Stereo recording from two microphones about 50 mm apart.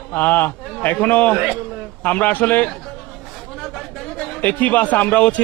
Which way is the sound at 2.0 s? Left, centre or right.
Left.